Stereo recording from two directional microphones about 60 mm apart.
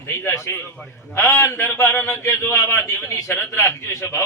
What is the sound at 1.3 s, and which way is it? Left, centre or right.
A man's voice, left.